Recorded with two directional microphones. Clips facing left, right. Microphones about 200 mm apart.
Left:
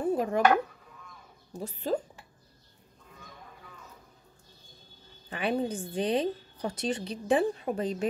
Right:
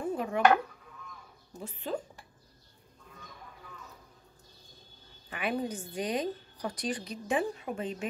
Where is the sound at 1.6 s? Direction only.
40° left (ahead or behind).